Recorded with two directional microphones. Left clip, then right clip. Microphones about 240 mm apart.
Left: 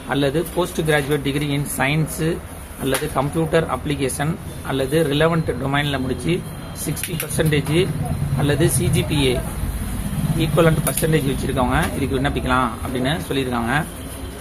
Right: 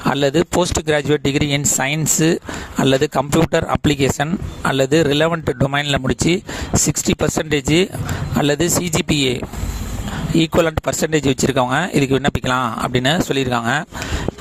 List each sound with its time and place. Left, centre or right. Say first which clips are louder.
0.1 s speech: right 4 dB; right